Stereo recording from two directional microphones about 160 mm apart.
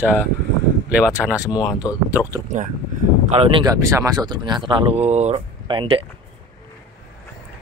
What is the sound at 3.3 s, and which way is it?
Speech, 35° right (ahead or behind).